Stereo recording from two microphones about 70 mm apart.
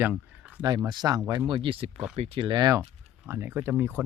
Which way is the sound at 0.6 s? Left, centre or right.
Right.